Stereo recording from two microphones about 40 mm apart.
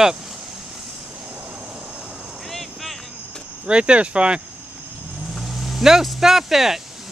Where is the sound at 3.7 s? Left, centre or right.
Right.